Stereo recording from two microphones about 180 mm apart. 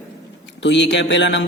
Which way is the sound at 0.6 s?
80° left.